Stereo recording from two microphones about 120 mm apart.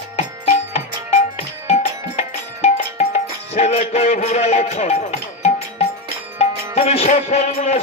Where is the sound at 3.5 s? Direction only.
60° left (ahead or behind).